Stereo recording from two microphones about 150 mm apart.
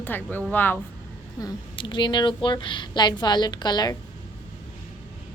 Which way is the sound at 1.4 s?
30° left (ahead or behind).